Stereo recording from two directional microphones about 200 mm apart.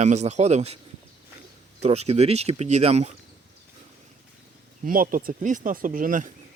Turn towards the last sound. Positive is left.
turn(degrees=-40)  # may be behind; listen again after turning